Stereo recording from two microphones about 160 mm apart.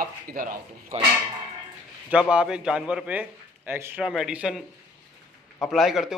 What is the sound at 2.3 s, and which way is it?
Speech, 5° right (ahead or behind).